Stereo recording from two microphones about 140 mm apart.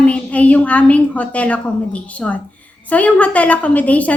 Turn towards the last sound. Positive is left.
turn(degrees=10)  # may be behind; listen again after turning